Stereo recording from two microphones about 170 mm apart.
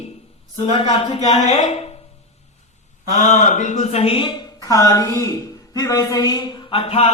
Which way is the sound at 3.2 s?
45° left (ahead or behind).